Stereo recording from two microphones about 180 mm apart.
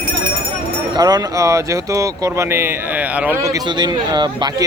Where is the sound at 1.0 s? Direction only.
20° right (ahead or behind).